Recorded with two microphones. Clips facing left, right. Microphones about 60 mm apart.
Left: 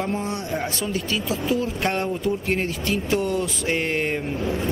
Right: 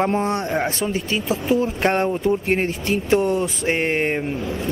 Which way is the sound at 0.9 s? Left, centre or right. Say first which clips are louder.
Right 3 dB; right.